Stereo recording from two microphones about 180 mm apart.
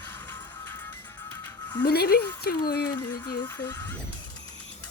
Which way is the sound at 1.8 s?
60° left (ahead or behind).